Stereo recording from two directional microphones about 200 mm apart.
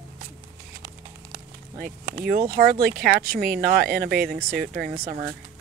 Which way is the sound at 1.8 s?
45° right (ahead or behind).